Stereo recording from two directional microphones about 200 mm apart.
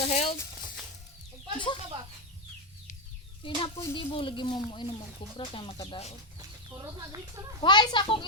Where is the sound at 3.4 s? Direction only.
25° left (ahead or behind).